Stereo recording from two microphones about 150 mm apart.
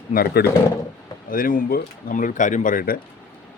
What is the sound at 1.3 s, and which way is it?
Speech, 70° left (ahead or behind).